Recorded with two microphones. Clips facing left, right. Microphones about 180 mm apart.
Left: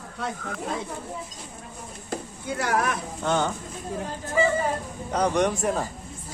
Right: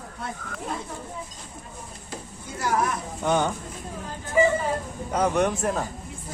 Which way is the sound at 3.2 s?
15° right (ahead or behind).